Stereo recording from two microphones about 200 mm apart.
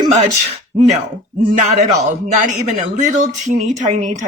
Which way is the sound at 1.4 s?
40° right (ahead or behind).